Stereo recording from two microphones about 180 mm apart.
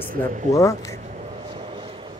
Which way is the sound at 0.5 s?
15° left (ahead or behind).